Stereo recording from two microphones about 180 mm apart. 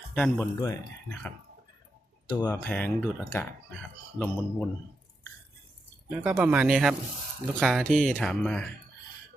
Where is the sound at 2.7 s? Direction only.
5° left (ahead or behind).